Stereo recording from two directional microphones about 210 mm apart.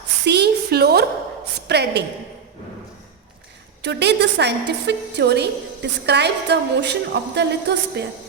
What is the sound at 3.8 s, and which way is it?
A woman's voice, 55° right (ahead or behind).